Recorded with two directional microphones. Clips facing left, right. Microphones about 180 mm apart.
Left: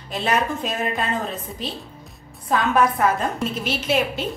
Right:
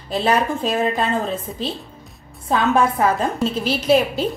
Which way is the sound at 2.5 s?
25° right (ahead or behind).